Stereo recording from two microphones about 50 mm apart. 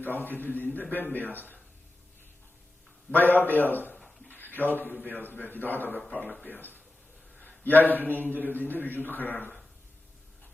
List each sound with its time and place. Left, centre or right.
0.3 s a man's voice: left
3.1 s a man's voice: left
4.3 s a sound: left
5.0 s a man's voice: left